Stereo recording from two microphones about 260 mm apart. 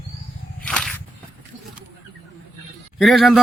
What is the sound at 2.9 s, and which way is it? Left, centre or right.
Speech, centre.